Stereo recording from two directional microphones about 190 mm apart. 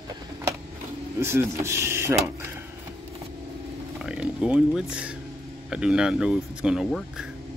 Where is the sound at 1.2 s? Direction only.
15° right (ahead or behind).